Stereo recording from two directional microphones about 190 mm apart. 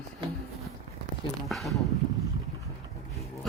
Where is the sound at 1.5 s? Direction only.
Centre (ahead or behind).